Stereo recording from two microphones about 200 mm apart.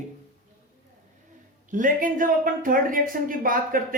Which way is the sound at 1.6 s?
40° right (ahead or behind).